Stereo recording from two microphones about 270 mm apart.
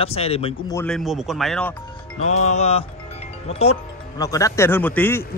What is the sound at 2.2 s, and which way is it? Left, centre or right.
Music, left.